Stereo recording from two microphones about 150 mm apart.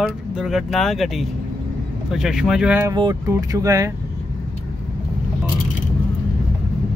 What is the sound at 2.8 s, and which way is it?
Speech, 25° right (ahead or behind).